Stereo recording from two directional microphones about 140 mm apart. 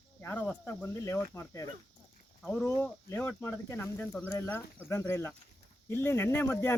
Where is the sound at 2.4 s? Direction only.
5° left (ahead or behind).